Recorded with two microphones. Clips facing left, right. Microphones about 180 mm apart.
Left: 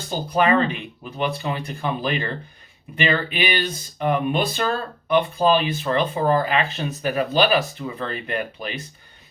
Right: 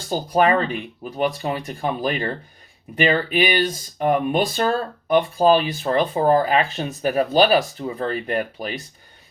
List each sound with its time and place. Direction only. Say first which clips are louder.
0.3 s speech: right 1 dB; 45° right (ahead or behind)